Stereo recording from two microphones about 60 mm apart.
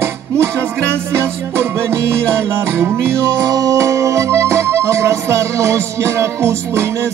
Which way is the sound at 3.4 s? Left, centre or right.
Right.